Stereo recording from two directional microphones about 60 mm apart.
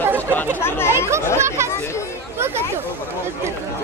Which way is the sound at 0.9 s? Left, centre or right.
Right.